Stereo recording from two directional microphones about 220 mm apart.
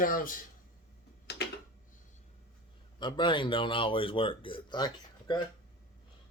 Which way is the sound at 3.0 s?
20° left (ahead or behind).